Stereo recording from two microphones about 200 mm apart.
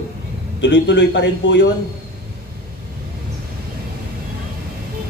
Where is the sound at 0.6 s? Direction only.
60° left (ahead or behind).